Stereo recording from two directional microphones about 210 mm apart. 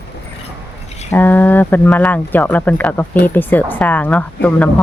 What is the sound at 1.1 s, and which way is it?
Speech, 10° left (ahead or behind).